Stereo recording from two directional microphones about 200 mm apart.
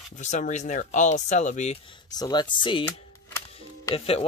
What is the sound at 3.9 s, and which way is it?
Speech, 30° left (ahead or behind).